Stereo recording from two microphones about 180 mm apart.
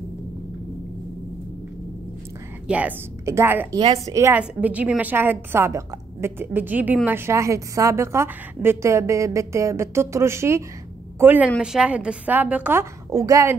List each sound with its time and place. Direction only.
2.7 s a woman's voice: 10° right (ahead or behind)